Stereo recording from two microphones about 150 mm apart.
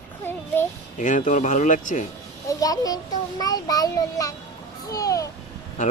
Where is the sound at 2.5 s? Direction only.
25° left (ahead or behind).